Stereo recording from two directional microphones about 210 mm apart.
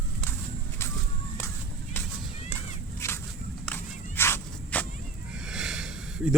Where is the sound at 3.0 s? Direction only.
15° left (ahead or behind).